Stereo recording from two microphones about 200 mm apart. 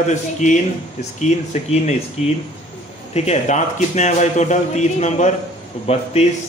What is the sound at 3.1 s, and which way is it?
Speech, 30° left (ahead or behind).